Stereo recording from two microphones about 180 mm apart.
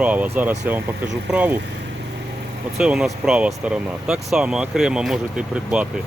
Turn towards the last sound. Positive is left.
turn(degrees=-5)  # may be behind; listen again after turning